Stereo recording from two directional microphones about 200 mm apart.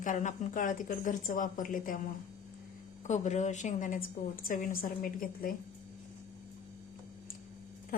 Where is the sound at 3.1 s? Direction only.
35° left (ahead or behind).